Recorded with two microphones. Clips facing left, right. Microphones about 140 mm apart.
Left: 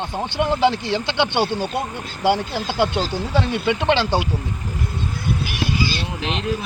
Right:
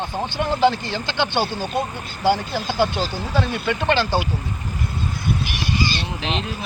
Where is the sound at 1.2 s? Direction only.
20° left (ahead or behind).